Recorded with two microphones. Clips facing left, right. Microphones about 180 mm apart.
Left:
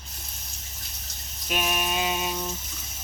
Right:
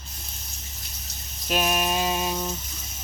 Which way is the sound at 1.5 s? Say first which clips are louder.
Right 4 dB; 40° right (ahead or behind).